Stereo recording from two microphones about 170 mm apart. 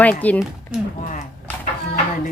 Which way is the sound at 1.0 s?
50° left (ahead or behind).